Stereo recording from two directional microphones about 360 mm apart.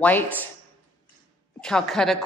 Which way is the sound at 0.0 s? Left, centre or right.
Centre.